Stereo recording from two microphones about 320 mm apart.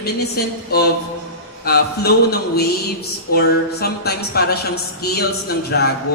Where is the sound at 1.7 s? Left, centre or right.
Left.